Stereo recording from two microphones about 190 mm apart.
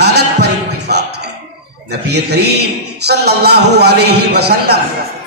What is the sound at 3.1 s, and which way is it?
Speech, 60° right (ahead or behind).